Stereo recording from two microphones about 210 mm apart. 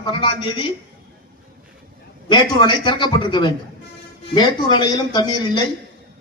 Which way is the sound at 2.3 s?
20° left (ahead or behind).